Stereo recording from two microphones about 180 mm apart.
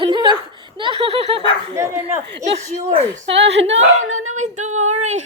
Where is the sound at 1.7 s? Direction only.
15° right (ahead or behind).